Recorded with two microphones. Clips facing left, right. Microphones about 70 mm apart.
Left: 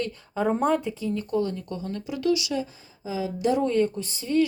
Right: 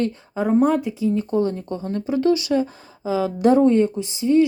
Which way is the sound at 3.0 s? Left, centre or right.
Right.